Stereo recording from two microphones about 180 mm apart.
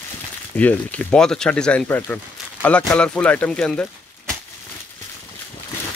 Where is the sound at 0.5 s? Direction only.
10° left (ahead or behind).